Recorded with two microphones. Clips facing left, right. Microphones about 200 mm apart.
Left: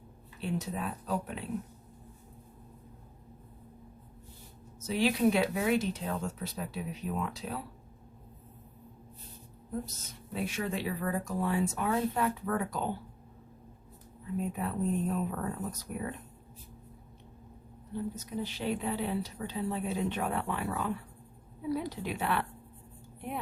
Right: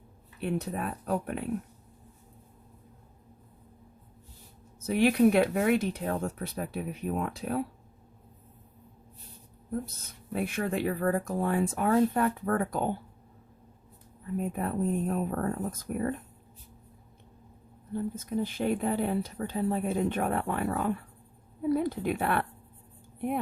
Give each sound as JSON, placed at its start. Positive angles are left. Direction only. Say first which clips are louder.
{"t": 0.3, "sound": "speech", "louder": "right 3 dB", "side_deg": -55}
{"t": 4.8, "sound": "speech", "louder": "right 5 dB", "side_deg": -55}
{"t": 10.3, "sound": "speech", "louder": "right 4 dB", "side_deg": -55}
{"t": 14.3, "sound": "speech", "louder": "right 3 dB", "side_deg": -50}
{"t": 17.9, "sound": "speech", "louder": "right 5 dB", "side_deg": -50}